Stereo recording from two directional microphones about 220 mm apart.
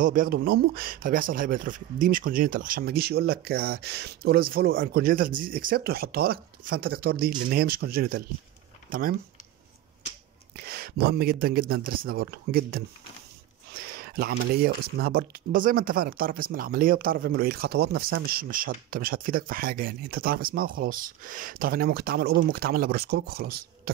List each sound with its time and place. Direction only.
0.0 s speech: 40° right (ahead or behind)
10.5 s speech: 45° right (ahead or behind)